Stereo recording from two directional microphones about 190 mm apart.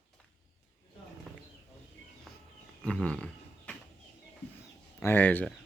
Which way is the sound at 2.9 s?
5° left (ahead or behind).